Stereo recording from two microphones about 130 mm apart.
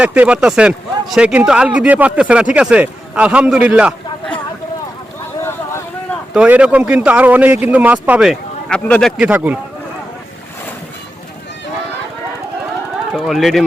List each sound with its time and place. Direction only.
0.0 s speech: 10° right (ahead or behind)
5.4 s boat: 20° left (ahead or behind)
6.3 s speech: 10° right (ahead or behind)
8.7 s a man's voice: 5° left (ahead or behind)
9.2 s speech: 10° right (ahead or behind)
13.1 s a man's voice: centre (ahead or behind)